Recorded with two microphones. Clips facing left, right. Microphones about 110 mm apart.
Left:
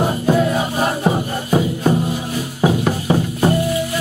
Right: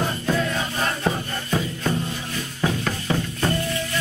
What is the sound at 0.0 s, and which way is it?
Music, 30° left (ahead or behind).